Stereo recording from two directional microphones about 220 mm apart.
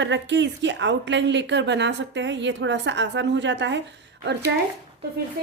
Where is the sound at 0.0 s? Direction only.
55° right (ahead or behind).